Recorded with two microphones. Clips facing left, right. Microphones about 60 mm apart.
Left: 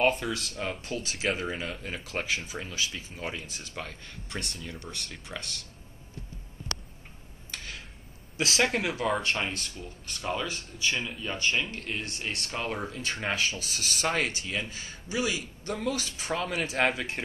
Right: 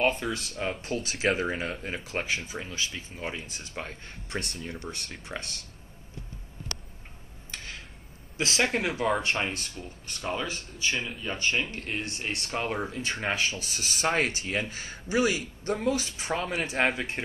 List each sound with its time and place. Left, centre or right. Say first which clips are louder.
0.0 s speech: left 1 dB; centre
0.9 s speech: right 4 dB; right
2.2 s speech: right 1 dB; centre
3.7 s speech: right 2 dB; right
8.4 s speech: even; centre
8.7 s speech: right 1 dB; centre
14.4 s speech: right 3 dB; right; by 17.2 s centre